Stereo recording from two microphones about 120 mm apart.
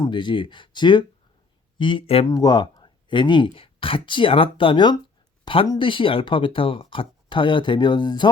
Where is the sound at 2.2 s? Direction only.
30° left (ahead or behind).